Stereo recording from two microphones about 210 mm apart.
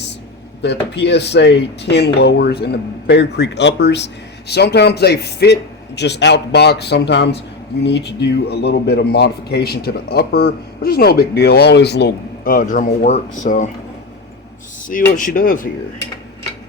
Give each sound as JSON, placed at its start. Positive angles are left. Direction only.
{"t": 0.6, "sound": "a man's voice", "side_deg": 55}
{"t": 15.1, "sound": "speech", "side_deg": 40}